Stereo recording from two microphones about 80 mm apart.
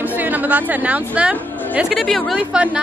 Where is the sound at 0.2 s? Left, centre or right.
Right.